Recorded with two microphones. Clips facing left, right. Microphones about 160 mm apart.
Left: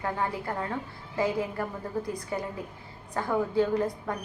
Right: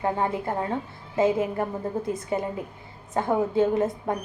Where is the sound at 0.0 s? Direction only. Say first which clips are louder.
Right 5 dB; 25° right (ahead or behind).